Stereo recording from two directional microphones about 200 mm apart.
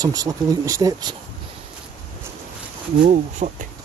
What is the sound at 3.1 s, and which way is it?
Speech, 35° right (ahead or behind).